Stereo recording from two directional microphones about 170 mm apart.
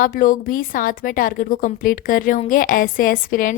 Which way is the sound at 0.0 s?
55° left (ahead or behind).